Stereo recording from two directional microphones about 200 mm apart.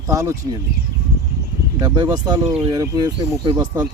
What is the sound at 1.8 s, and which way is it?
Speech, 20° right (ahead or behind).